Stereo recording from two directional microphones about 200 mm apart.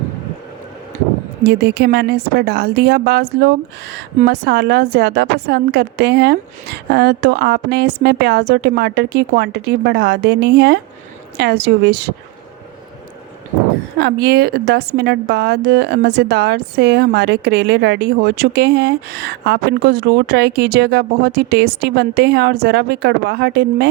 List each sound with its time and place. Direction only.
1.5 s a woman's voice: 55° right (ahead or behind)
14.0 s a woman's voice: 55° right (ahead or behind)